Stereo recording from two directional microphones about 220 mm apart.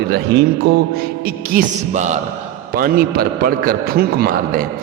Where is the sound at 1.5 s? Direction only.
35° right (ahead or behind).